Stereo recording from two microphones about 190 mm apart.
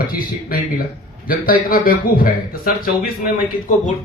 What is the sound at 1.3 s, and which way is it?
Speech, 50° left (ahead or behind).